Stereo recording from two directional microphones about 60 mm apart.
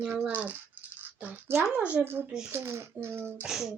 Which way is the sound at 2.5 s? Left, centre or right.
Right.